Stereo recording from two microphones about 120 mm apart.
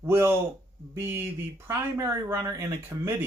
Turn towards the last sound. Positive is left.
turn(degrees=-20)  # may be behind; listen again after turning